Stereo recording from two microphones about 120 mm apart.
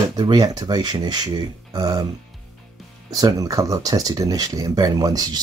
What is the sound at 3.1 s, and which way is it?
Speech, 30° right (ahead or behind).